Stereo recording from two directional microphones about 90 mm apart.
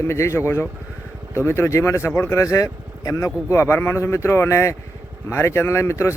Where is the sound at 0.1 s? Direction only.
30° left (ahead or behind).